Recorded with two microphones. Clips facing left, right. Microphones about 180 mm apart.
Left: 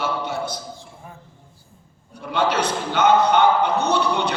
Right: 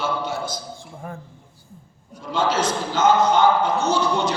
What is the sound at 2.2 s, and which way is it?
A man's voice, 60° left (ahead or behind).